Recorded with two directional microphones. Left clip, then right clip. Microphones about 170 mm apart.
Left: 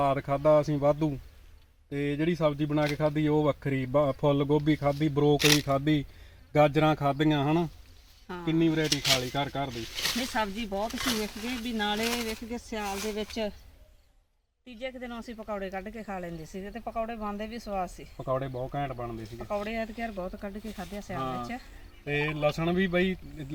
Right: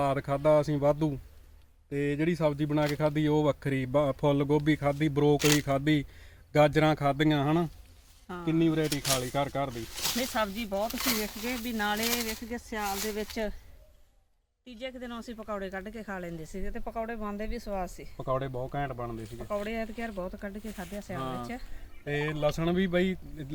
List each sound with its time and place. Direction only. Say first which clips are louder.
0.0 s speech: left 2 dB; 10° right (ahead or behind); by 5.7 s 10° left (ahead or behind)
5.7 s speech: even; 5° right (ahead or behind)
8.9 s speech: left 4 dB; 35° right (ahead or behind)
9.3 s speech: right 1 dB; 5° right (ahead or behind)
9.9 s speech: left 3 dB; 35° right (ahead or behind)
10.5 s speech: right 1 dB; centre (ahead or behind)
11.0 s speech: even; 20° right (ahead or behind)
12.5 s speech: right 1 dB; 30° left (ahead or behind)
14.8 s speech: left 1 dB; centre (ahead or behind); by 17.9 s 15° right (ahead or behind)
18.2 s speech: left 1 dB; centre (ahead or behind)
19.5 s speech: left 1 dB; 20° right (ahead or behind)
21.2 s speech: left 3 dB; 5° right (ahead or behind)